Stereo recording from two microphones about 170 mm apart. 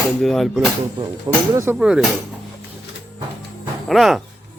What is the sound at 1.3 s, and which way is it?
Speech, 20° right (ahead or behind).